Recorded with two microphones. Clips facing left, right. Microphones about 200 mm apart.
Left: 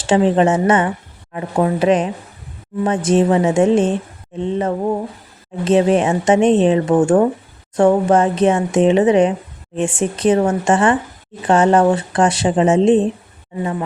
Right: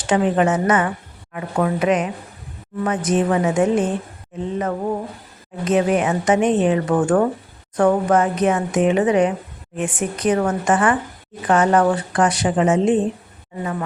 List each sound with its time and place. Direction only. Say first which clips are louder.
0.0 s a woman's voice: left 4 dB; 25° left (ahead or behind)